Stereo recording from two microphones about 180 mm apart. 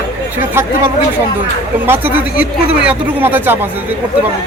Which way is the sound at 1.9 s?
10° right (ahead or behind).